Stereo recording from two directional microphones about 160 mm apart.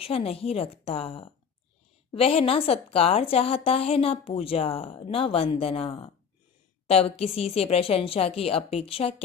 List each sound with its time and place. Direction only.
0.0 s a woman's voice: 35° left (ahead or behind)